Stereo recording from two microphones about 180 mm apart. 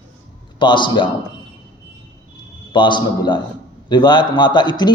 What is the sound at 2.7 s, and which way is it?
A man's voice, 25° left (ahead or behind).